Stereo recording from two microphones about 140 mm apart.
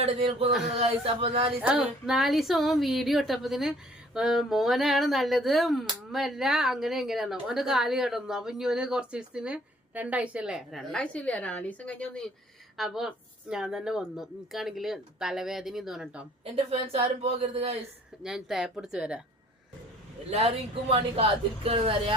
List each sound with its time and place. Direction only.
0.0 s a woman's voice: 40° right (ahead or behind)
1.6 s a woman's voice: 5° right (ahead or behind)
16.4 s a woman's voice: 45° right (ahead or behind)
18.2 s a woman's voice: 5° right (ahead or behind)
20.9 s a woman's voice: 45° right (ahead or behind)